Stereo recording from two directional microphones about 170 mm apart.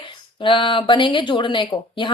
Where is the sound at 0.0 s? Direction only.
30° left (ahead or behind).